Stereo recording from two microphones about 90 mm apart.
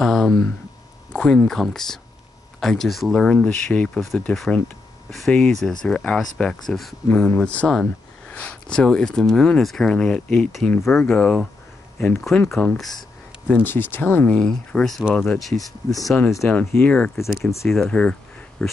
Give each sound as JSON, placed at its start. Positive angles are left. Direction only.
{"t": 0.0, "sound": "a sound", "side_deg": 0}
{"t": 1.1, "sound": "speech", "side_deg": 10}
{"t": 8.3, "sound": "speech", "side_deg": 15}
{"t": 13.5, "sound": "speech", "side_deg": 20}
{"t": 14.3, "sound": "speech", "side_deg": 10}
{"t": 16.4, "sound": "speech", "side_deg": 15}